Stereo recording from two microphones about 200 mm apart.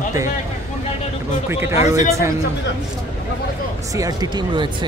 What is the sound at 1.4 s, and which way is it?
Speech, 10° right (ahead or behind).